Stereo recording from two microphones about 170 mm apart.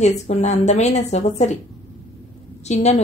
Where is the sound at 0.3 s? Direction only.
40° left (ahead or behind).